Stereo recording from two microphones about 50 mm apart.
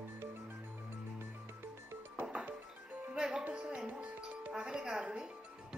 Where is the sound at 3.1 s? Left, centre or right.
Centre.